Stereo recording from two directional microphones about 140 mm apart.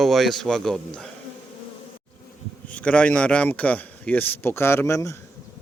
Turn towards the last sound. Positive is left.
turn(degrees=20)  # may be behind; listen again after turning